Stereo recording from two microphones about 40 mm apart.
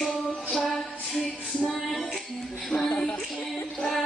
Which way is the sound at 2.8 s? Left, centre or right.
Left.